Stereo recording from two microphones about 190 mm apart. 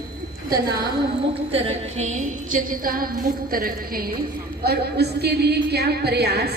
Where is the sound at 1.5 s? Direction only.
35° right (ahead or behind).